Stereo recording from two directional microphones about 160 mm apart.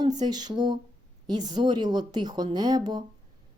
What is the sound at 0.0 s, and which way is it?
A woman's voice, 25° right (ahead or behind).